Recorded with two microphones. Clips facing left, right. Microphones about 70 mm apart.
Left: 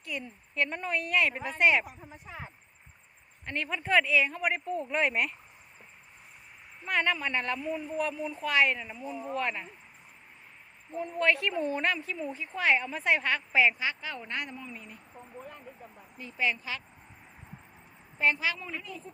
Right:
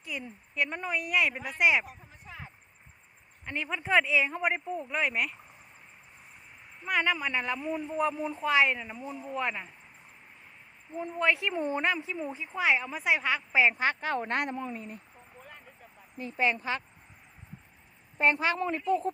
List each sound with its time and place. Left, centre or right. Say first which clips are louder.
0.0 s speech: left 1 dB; centre
3.4 s speech: even; centre
4.7 s speech: left 2 dB; centre
6.8 s speech: even; centre
10.9 s speech: left 1 dB; centre
13.7 s a woman's voice: right 6 dB; right
14.7 s speech: right 6 dB; right
16.1 s speech: right 3 dB; right
18.2 s a woman's voice: right 3 dB; right